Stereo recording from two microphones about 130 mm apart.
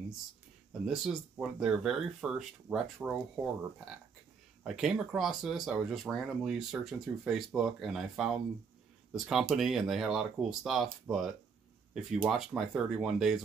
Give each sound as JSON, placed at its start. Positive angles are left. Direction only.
{"t": 0.8, "sound": "speech", "side_deg": -5}
{"t": 4.6, "sound": "speech", "side_deg": -5}